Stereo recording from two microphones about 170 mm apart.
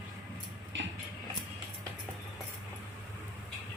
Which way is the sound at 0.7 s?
90° right.